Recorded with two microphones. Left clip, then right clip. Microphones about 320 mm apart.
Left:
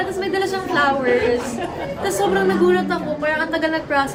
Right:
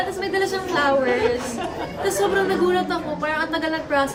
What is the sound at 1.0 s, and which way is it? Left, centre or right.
Speech, right.